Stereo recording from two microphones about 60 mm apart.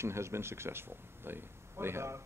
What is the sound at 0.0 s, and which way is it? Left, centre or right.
Speech, right.